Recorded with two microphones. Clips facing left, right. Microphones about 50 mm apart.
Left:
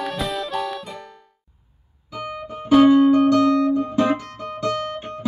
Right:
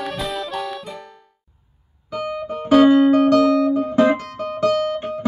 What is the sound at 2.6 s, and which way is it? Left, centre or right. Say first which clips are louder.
Music: right 1 dB; right.